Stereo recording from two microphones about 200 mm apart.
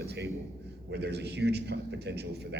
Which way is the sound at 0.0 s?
55° right (ahead or behind).